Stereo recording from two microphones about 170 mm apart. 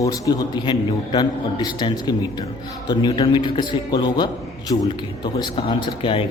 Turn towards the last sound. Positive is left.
turn(degrees=30)  # may be behind; listen again after turning